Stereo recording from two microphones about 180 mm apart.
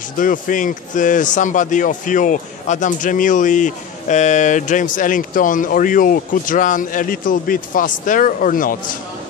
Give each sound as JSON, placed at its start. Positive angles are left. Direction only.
{"t": 0.2, "sound": "a man's voice", "side_deg": 45}